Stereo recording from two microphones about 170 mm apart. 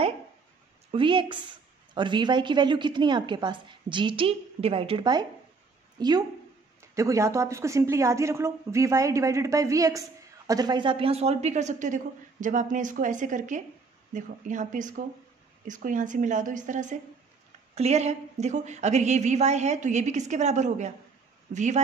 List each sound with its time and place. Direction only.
0.9 s a woman's voice: 30° right (ahead or behind); by 21.8 s 45° right (ahead or behind)